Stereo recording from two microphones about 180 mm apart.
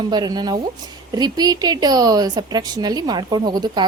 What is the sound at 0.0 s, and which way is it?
A woman's voice, 20° right (ahead or behind).